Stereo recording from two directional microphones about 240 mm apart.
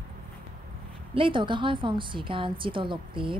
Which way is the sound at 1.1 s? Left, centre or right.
Right.